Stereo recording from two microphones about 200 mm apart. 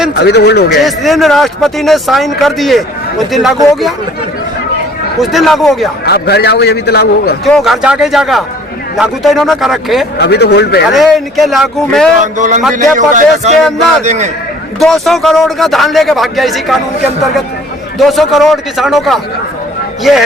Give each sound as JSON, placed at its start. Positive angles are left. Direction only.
{"t": 0.2, "sound": "a man's voice", "side_deg": 60}
{"t": 0.8, "sound": "speech", "side_deg": 0}
{"t": 5.2, "sound": "speech", "side_deg": 0}
{"t": 6.1, "sound": "a man's voice", "side_deg": 55}
{"t": 7.4, "sound": "speech", "side_deg": 0}
{"t": 10.2, "sound": "a man's voice", "side_deg": 55}
{"t": 10.9, "sound": "speech", "side_deg": 0}
{"t": 12.2, "sound": "speech", "side_deg": -40}
{"t": 14.8, "sound": "speech", "side_deg": 0}
{"t": 18.0, "sound": "speech", "side_deg": 0}